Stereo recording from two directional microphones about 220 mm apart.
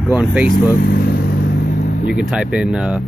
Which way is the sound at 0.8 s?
45° left (ahead or behind).